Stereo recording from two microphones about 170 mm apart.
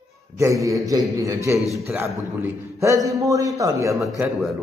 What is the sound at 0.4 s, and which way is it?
A man's voice, 20° right (ahead or behind).